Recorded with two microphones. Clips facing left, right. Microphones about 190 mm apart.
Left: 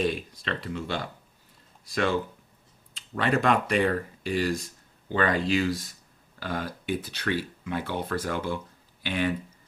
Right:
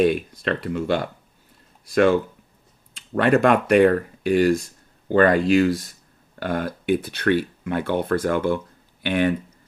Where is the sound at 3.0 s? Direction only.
55° right (ahead or behind).